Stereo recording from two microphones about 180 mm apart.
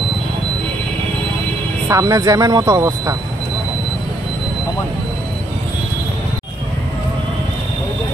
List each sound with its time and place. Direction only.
1.9 s speech: 20° right (ahead or behind)